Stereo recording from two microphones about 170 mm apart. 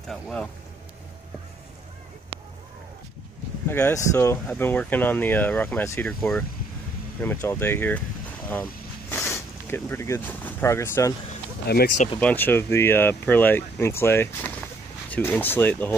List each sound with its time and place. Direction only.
0.1 s speech: 5° left (ahead or behind)
3.6 s speech: 15° left (ahead or behind)
9.1 s a sound: 15° left (ahead or behind)
11.6 s speech: 65° left (ahead or behind)
12.2 s speech: 10° left (ahead or behind)